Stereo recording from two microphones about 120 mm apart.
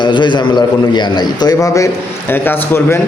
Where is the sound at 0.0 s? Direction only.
40° left (ahead or behind); by 3.0 s 20° left (ahead or behind).